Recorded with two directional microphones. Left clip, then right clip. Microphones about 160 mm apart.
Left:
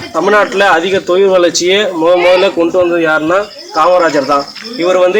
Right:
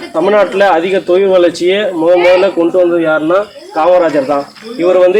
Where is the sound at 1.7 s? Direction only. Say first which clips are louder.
Even; 15° left (ahead or behind).